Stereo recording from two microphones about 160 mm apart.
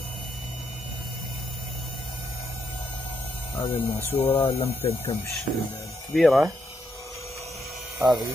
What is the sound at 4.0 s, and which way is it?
Speech, 15° left (ahead or behind).